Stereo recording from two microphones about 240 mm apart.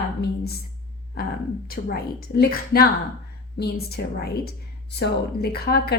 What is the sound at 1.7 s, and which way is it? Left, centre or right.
A woman's voice, left.